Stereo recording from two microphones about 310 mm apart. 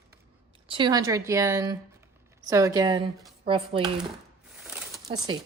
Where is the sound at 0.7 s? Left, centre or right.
Centre.